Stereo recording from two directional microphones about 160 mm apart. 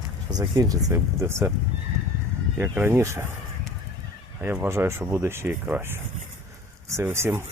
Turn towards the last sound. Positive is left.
turn(degrees=-15)  # may be behind; listen again after turning